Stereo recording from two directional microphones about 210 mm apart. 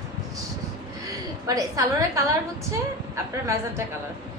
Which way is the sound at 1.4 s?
15° right (ahead or behind).